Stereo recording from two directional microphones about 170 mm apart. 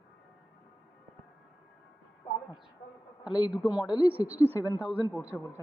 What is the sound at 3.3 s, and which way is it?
A woman's voice, 25° left (ahead or behind).